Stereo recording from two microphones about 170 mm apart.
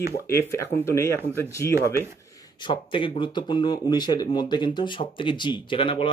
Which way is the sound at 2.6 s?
30° left (ahead or behind).